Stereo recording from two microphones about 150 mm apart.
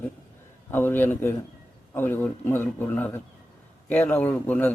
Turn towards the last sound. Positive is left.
turn(degrees=10)  # may be behind; listen again after turning